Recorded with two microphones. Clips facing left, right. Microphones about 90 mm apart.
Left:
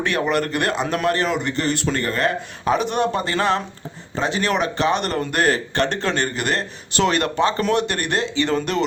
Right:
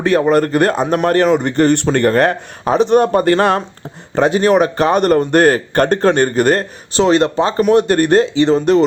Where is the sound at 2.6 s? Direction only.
35° right (ahead or behind).